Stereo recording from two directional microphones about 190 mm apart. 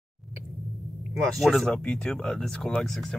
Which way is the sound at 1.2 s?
Centre (ahead or behind).